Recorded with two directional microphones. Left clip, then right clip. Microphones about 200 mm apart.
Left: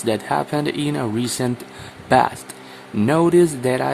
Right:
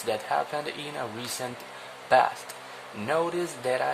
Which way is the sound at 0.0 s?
20° left (ahead or behind).